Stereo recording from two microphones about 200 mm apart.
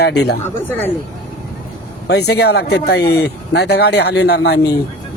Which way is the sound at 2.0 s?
55° left (ahead or behind).